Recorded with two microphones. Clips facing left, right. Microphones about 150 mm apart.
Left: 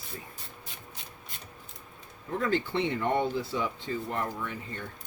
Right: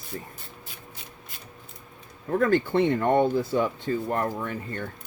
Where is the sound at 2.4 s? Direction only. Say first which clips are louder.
Right 7 dB; 50° right (ahead or behind).